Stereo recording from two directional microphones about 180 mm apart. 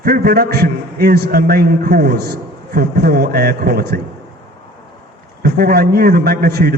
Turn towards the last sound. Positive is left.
turn(degrees=-60)  # may be behind; listen again after turning